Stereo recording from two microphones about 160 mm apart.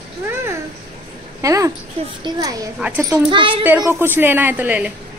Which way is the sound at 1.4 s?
20° right (ahead or behind).